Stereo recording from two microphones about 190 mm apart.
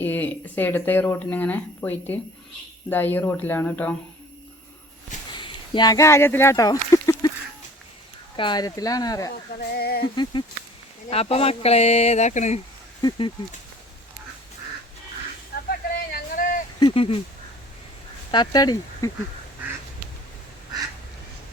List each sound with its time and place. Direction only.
0.0 s speech: 10° left (ahead or behind)
5.3 s speech: 25° left (ahead or behind)
8.4 s speech: 25° left (ahead or behind)
9.3 s speech: 55° left (ahead or behind)
10.0 s speech: 25° left (ahead or behind)
13.0 s speech: 25° left (ahead or behind)
15.7 s a sound: 50° left (ahead or behind)
16.8 s speech: 30° left (ahead or behind)
18.3 s speech: 20° left (ahead or behind)